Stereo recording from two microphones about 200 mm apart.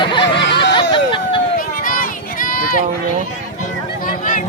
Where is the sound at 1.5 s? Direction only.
45° left (ahead or behind).